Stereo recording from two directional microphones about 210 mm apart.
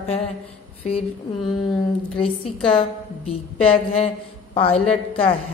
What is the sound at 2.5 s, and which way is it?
Speech, centre (ahead or behind).